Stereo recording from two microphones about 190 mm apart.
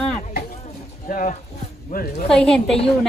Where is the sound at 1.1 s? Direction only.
45° left (ahead or behind).